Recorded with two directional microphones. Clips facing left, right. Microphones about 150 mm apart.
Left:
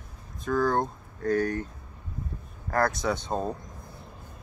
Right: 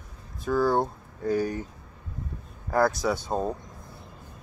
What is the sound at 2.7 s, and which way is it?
Speech, 5° right (ahead or behind).